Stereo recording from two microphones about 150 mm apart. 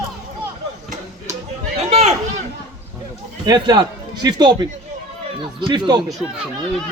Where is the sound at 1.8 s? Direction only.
45° right (ahead or behind).